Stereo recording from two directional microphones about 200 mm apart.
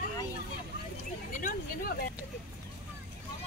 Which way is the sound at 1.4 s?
45° left (ahead or behind).